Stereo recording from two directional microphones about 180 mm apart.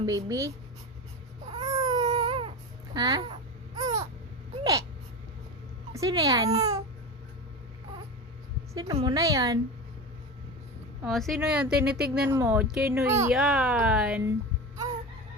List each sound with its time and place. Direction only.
0.0 s speech: 20° right (ahead or behind)
1.5 s baby cry: 25° right (ahead or behind)
2.0 s a sound: 35° right (ahead or behind)
2.9 s speech: 25° right (ahead or behind)
4.6 s gasp: 20° right (ahead or behind)
5.9 s speech: 20° right (ahead or behind)
8.7 s a woman's voice: 20° right (ahead or behind)
11.0 s speech: centre (ahead or behind)
11.9 s speech: 60° right (ahead or behind)
12.3 s speech: 10° right (ahead or behind)
13.3 s speech: centre (ahead or behind)